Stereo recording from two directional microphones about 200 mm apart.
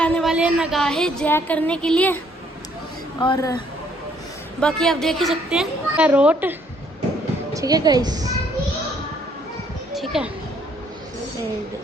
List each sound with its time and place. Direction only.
0.0 s a woman's voice: centre (ahead or behind)
3.2 s a woman's voice: 20° left (ahead or behind)
4.6 s a woman's voice: 5° left (ahead or behind)
7.5 s a woman's voice: 20° right (ahead or behind)
9.9 s children playing: centre (ahead or behind)